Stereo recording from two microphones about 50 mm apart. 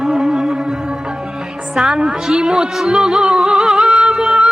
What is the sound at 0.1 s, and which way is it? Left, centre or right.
Music, centre.